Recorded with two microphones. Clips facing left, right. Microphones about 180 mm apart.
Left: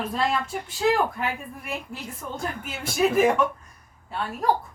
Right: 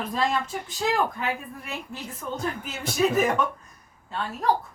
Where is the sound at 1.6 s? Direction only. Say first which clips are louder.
Left 4 dB; 10° left (ahead or behind).